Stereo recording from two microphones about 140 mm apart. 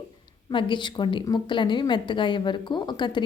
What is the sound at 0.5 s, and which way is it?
A woman's voice, 35° left (ahead or behind).